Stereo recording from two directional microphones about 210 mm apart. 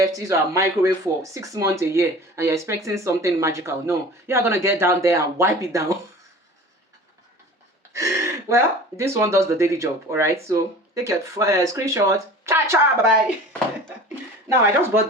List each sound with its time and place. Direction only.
0.0 s speech: 15° right (ahead or behind)
7.9 s speech: 15° right (ahead or behind)
14.4 s speech: 15° right (ahead or behind)